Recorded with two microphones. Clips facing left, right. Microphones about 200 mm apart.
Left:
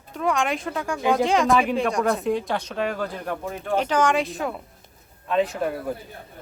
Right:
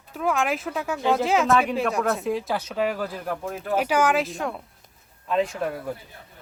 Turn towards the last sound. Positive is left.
turn(degrees=0)  # may be behind; listen again after turning